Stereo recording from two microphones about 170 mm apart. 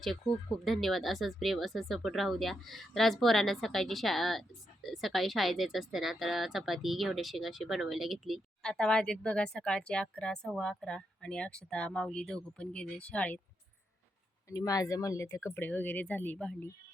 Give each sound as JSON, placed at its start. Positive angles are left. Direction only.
{"t": 0.6, "sound": "speech", "side_deg": 0}
{"t": 14.5, "sound": "speech", "side_deg": 20}